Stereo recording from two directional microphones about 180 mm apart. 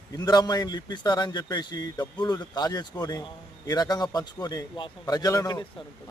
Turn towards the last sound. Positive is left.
turn(degrees=20)  # may be behind; listen again after turning